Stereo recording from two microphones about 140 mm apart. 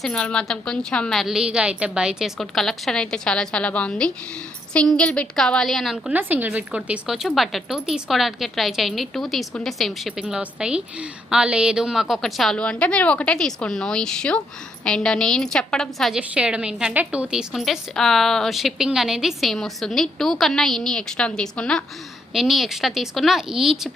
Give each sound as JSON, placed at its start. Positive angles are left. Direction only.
{"t": 0.0, "sound": "a woman's voice", "side_deg": 5}
{"t": 6.1, "sound": "a woman's voice", "side_deg": -15}